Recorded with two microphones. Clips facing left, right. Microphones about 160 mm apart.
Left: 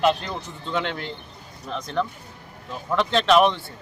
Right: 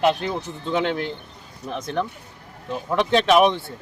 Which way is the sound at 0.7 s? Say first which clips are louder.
Right 4 dB; 10° right (ahead or behind).